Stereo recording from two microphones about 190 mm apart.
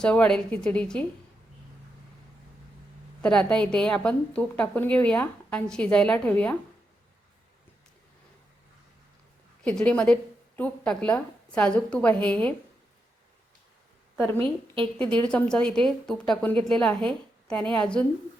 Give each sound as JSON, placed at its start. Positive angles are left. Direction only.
{"t": 0.0, "sound": "a woman's voice", "side_deg": 5}
{"t": 3.2, "sound": "a woman's voice", "side_deg": 5}
{"t": 9.6, "sound": "speech", "side_deg": 5}
{"t": 14.3, "sound": "a woman's voice", "side_deg": -30}
{"t": 14.9, "sound": "a woman's voice", "side_deg": 5}